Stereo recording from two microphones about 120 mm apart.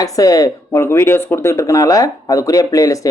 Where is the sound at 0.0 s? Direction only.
30° left (ahead or behind).